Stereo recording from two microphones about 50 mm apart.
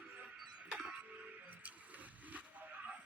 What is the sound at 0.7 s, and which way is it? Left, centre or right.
Tick-tock, centre.